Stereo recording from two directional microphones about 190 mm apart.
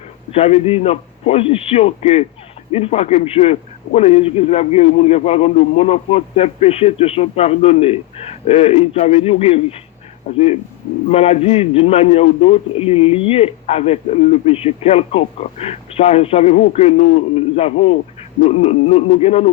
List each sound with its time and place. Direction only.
0.3 s a man's voice: 30° left (ahead or behind)